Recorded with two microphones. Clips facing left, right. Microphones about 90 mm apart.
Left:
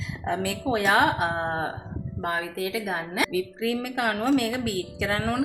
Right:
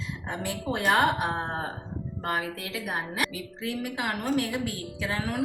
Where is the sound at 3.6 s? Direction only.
90° left.